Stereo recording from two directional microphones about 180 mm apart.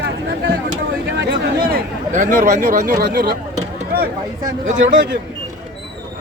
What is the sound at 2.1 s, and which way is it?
Speech, 45° right (ahead or behind).